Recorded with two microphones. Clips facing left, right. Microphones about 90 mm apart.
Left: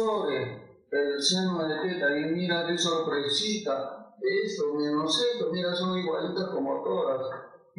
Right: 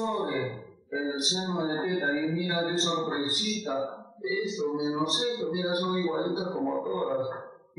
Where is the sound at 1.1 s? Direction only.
Centre (ahead or behind).